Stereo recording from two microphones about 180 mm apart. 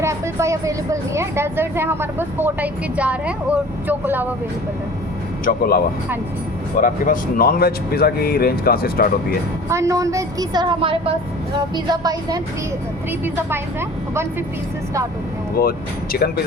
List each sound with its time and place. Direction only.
0.0 s speech: 15° right (ahead or behind)
5.5 s speech: 55° left (ahead or behind)
9.6 s a woman's voice: 15° right (ahead or behind)
15.6 s speech: 55° left (ahead or behind)